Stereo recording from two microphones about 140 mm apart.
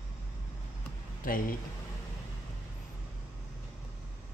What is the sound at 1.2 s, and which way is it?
Speech, 90° left.